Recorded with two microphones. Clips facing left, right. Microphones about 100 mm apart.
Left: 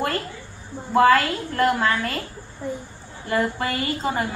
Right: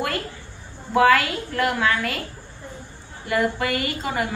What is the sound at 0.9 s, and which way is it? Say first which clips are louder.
A woman's voice: left 1 dB; 40° left (ahead or behind).